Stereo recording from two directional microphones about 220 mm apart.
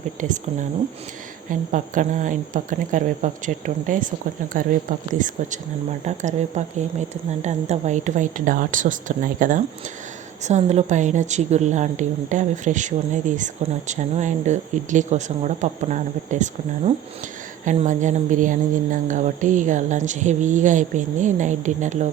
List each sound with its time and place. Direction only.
0.2 s a woman's voice: 35° right (ahead or behind)
1.5 s a woman's voice: 35° right (ahead or behind)